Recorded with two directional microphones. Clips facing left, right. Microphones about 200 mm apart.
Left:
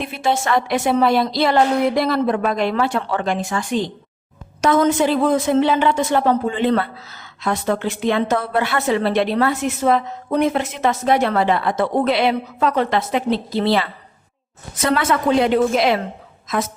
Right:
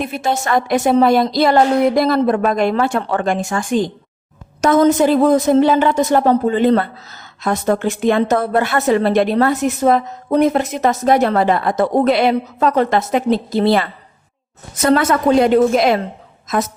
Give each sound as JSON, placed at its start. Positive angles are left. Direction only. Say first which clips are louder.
{"t": 0.0, "sound": "a woman's voice", "louder": "right 1 dB", "side_deg": -45}